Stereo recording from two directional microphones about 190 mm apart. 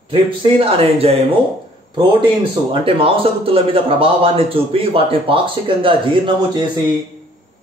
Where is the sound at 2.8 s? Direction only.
30° right (ahead or behind).